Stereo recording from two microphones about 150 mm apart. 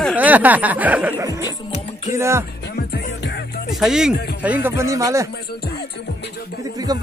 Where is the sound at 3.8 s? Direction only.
5° right (ahead or behind); by 5.3 s 20° right (ahead or behind).